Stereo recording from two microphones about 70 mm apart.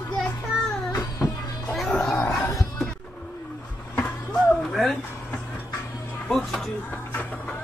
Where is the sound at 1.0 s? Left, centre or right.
Left.